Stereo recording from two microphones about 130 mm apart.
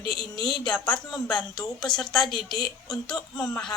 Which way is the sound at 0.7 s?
5° left (ahead or behind).